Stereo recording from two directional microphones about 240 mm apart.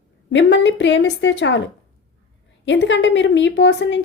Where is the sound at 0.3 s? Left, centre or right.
Left.